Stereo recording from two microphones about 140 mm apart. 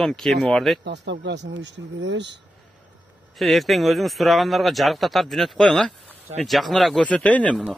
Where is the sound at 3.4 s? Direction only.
Centre (ahead or behind).